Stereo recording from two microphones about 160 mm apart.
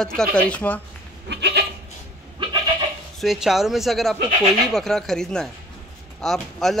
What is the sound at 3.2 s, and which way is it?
Speech, centre (ahead or behind).